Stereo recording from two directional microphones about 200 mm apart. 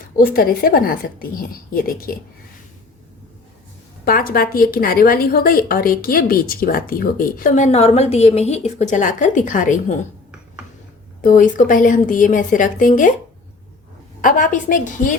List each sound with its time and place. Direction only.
0.2 s a woman's voice: 45° left (ahead or behind)
4.0 s a woman's voice: 45° left (ahead or behind)
11.2 s a woman's voice: 40° left (ahead or behind)
14.2 s a woman's voice: 40° left (ahead or behind)